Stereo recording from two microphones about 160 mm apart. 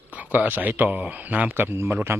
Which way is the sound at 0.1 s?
10° right (ahead or behind).